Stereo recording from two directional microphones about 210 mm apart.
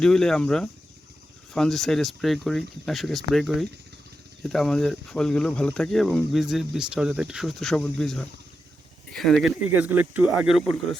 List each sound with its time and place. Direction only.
0.0 s speech: centre (ahead or behind)